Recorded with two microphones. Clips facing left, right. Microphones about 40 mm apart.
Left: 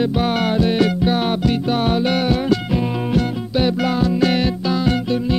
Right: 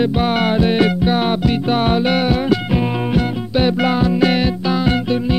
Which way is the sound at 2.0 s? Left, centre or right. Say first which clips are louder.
Right 2 dB; right.